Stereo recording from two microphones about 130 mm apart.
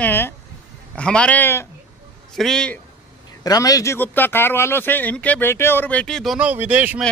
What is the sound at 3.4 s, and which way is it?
Speech, 30° left (ahead or behind).